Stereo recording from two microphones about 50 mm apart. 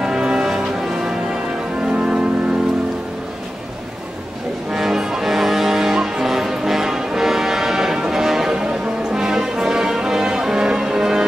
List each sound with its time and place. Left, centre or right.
0.0 s music: centre
1.9 s music: centre
4.7 s music: centre